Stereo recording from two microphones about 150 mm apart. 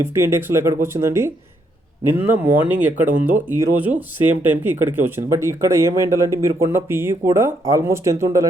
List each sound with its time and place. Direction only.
0.0 s speech: 15° right (ahead or behind)